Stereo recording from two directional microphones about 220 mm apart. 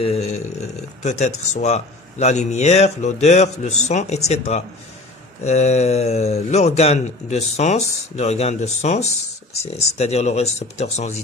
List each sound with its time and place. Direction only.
0.0 s speech: 30° left (ahead or behind)